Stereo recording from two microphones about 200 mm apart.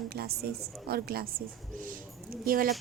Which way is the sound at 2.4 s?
45° right (ahead or behind).